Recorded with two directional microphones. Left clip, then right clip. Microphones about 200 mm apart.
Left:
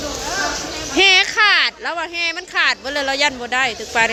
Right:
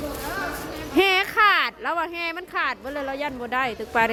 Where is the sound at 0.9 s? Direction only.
20° right (ahead or behind).